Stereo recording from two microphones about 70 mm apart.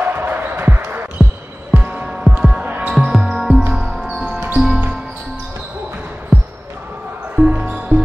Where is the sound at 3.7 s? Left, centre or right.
Centre.